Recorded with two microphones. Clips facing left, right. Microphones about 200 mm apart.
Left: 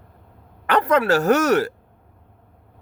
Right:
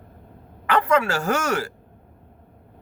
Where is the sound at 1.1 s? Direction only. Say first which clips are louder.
Left 7 dB; 60° left (ahead or behind).